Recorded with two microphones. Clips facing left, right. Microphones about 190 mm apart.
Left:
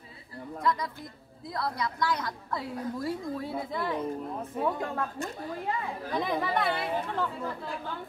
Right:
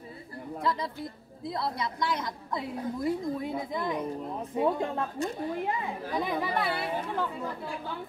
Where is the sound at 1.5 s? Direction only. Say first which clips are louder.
Even; 25° right (ahead or behind).